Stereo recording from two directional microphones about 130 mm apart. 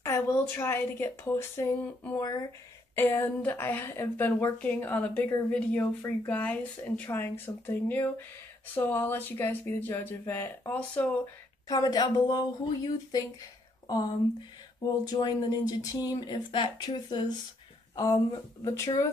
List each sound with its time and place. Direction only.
0.0 s speech: 20° left (ahead or behind)
3.0 s speech: 15° left (ahead or behind)
11.6 s speech: 30° left (ahead or behind)
15.1 s speech: 35° left (ahead or behind)